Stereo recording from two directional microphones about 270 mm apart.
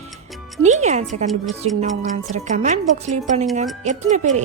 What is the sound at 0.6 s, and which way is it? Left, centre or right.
A woman's voice, right.